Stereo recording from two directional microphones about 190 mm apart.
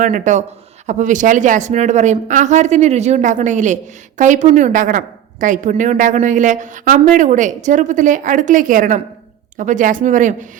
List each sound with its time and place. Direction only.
0.0 s a woman's voice: 40° right (ahead or behind)